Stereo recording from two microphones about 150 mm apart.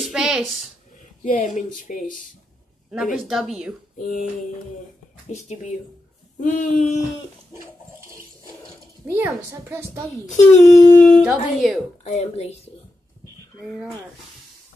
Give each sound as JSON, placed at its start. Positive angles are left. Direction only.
{"t": 0.0, "sound": "a sound", "side_deg": -5}
{"t": 1.2, "sound": "speech", "side_deg": 55}
{"t": 2.9, "sound": "speech", "side_deg": -5}
{"t": 4.0, "sound": "speech", "side_deg": 60}
{"t": 5.3, "sound": "speech", "side_deg": 55}
{"t": 6.4, "sound": "speech", "side_deg": 65}
{"t": 9.0, "sound": "a woman's voice", "side_deg": -15}
{"t": 10.2, "sound": "speech", "side_deg": 55}
{"t": 11.1, "sound": "speech", "side_deg": -5}
{"t": 12.0, "sound": "speech", "side_deg": 50}